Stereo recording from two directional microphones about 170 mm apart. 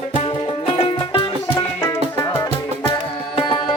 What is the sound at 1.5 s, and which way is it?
Music, 15° left (ahead or behind).